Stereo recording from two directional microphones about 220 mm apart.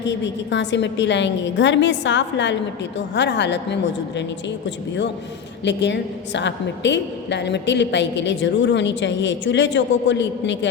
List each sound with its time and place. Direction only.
0.5 s a woman's voice: 55° left (ahead or behind)
5.6 s a woman's voice: 55° left (ahead or behind)